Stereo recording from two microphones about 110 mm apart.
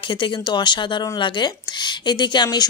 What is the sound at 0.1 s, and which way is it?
Speech, 45° left (ahead or behind).